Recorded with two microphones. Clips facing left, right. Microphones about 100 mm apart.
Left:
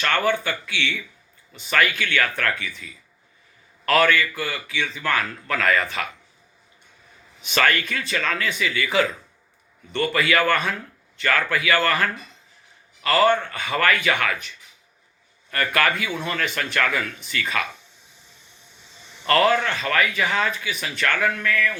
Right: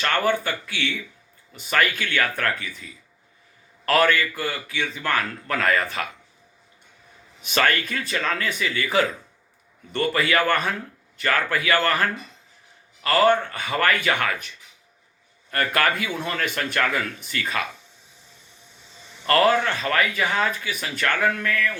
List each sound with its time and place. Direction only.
0.1 s speech: 40° right (ahead or behind)
7.4 s speech: 40° right (ahead or behind)
10.2 s a man's voice: 35° right (ahead or behind)
19.3 s speech: 40° right (ahead or behind)